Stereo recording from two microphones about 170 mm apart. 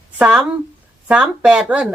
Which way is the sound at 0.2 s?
5° right (ahead or behind).